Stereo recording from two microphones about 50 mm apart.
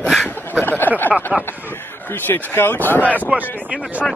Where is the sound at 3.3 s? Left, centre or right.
Right.